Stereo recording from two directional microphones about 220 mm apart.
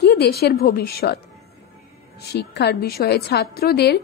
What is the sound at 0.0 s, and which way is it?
A woman's voice, 45° left (ahead or behind).